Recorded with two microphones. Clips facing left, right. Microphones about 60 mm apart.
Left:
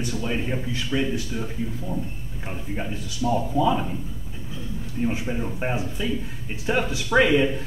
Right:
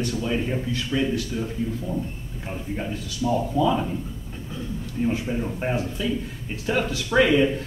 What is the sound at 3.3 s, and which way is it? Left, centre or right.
Speech, centre.